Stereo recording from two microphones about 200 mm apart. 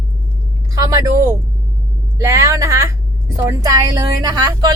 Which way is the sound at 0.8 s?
15° right (ahead or behind).